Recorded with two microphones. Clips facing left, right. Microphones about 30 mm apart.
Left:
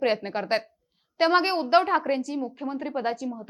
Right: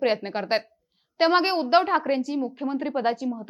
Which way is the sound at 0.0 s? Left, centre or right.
Centre.